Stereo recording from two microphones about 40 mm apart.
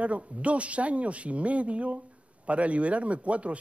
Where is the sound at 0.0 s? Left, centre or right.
Right.